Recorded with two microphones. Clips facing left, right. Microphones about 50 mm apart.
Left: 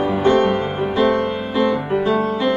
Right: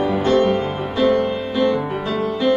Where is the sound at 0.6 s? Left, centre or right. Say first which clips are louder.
Left 2 dB; left.